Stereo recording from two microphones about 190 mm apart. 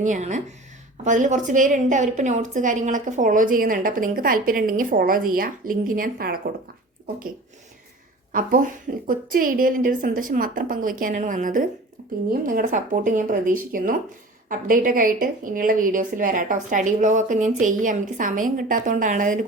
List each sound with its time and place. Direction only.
0.0 s a woman's voice: 40° right (ahead or behind)
8.3 s a woman's voice: 45° right (ahead or behind)